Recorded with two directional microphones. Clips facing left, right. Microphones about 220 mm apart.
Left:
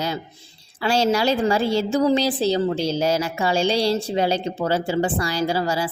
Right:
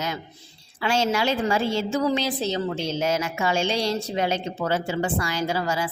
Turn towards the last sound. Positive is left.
turn(degrees=35)  # may be behind; listen again after turning